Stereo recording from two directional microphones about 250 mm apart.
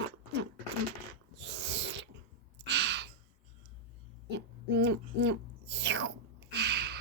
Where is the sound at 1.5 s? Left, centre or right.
Right.